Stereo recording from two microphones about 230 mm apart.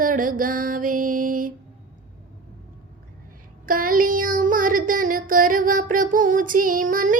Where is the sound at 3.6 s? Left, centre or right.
Right.